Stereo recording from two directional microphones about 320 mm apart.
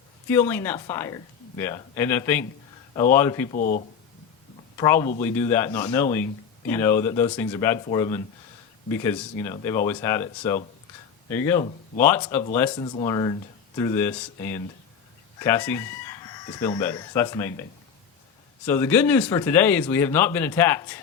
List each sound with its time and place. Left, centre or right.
0.3 s speech: centre
3.5 s speech: left
4.8 s speech: centre
15.4 s chicken: centre
18.6 s speech: centre